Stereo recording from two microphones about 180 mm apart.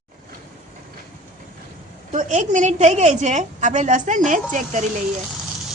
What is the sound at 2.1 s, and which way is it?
A woman's voice, 40° right (ahead or behind).